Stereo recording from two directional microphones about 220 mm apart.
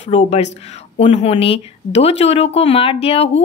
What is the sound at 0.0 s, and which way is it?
A woman's voice, 30° left (ahead or behind).